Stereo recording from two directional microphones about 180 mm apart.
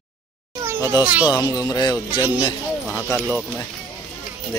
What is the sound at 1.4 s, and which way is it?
Speech, 20° left (ahead or behind).